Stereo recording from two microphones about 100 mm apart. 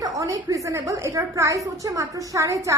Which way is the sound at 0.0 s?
35° right (ahead or behind).